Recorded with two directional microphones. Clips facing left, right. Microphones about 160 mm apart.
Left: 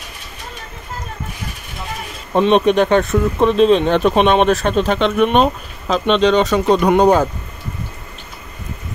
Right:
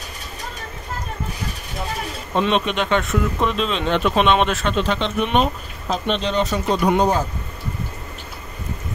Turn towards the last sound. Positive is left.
turn(degrees=60)  # may be behind; listen again after turning